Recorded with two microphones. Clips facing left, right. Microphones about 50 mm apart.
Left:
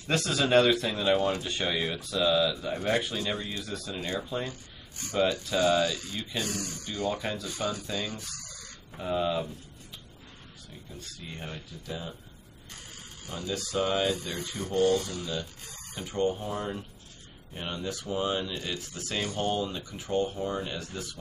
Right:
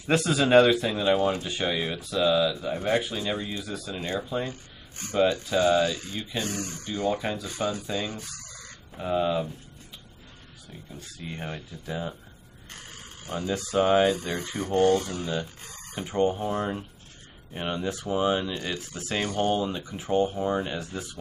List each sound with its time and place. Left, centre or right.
0.0 s speech: centre
5.0 s speech: right
7.1 s speech: centre
7.4 s speech: right
8.9 s speech: centre
11.1 s speech: right
19.1 s speech: right
19.4 s speech: right